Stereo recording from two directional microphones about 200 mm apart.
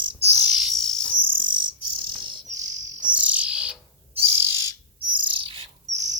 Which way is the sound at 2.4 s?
35° right (ahead or behind).